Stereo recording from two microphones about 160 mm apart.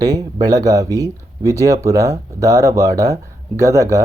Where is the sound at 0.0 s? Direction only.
25° right (ahead or behind).